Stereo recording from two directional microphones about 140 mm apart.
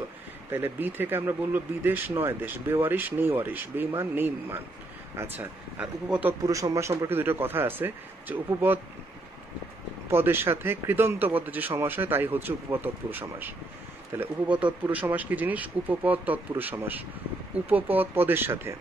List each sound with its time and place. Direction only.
0.5 s speech: 15° right (ahead or behind)
6.4 s speech: 25° right (ahead or behind)
10.0 s speech: 15° right (ahead or behind)